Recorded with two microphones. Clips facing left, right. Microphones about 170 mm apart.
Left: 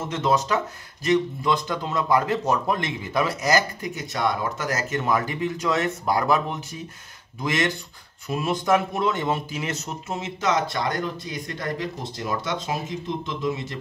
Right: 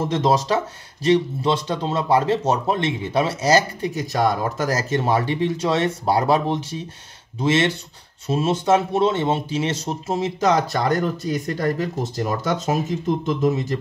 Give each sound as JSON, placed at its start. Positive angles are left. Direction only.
{"t": 0.0, "sound": "speech", "side_deg": -35}
{"t": 8.3, "sound": "speech", "side_deg": -25}